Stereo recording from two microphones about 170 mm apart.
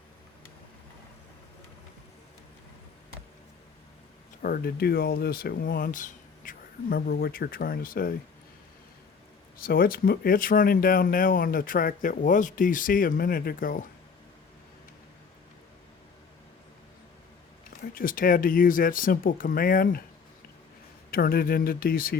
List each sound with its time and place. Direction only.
4.4 s speech: 60° left (ahead or behind)
9.6 s speech: 60° left (ahead or behind)
17.9 s speech: 55° left (ahead or behind)
21.1 s speech: 60° left (ahead or behind)